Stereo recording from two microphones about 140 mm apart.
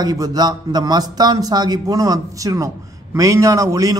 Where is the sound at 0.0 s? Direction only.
25° right (ahead or behind).